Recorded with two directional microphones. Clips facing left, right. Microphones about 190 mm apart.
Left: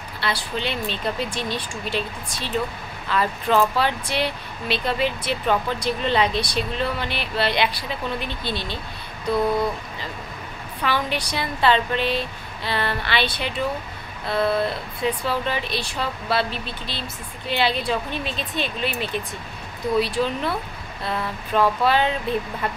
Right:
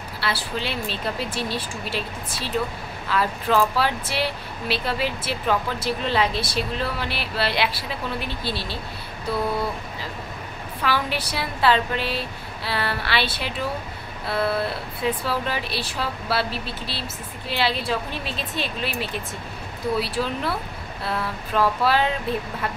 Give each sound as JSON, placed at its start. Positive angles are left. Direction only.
{"t": 0.2, "sound": "speech", "side_deg": -5}
{"t": 3.1, "sound": "speech", "side_deg": -5}
{"t": 10.8, "sound": "speech", "side_deg": -5}